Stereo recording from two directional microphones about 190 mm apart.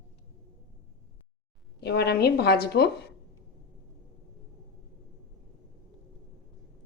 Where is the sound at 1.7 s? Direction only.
60° left (ahead or behind).